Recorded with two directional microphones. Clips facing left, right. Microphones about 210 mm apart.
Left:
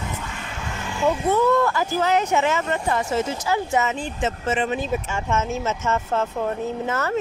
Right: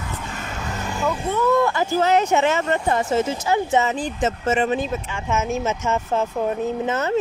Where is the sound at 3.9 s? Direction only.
35° right (ahead or behind).